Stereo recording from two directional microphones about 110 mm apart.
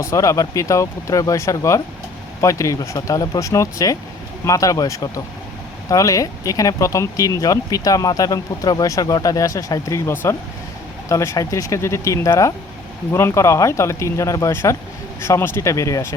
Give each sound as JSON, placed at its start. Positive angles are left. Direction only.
{"t": 0.0, "sound": "speech", "side_deg": 30}